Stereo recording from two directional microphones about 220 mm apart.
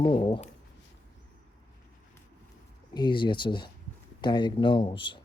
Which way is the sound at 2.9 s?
20° left (ahead or behind).